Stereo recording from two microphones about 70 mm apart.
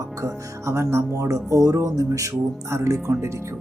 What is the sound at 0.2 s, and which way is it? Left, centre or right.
Speech, right.